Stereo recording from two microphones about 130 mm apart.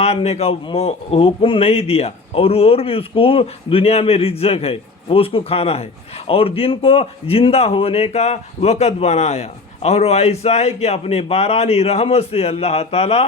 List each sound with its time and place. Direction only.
0.0 s a man's voice: 55° left (ahead or behind)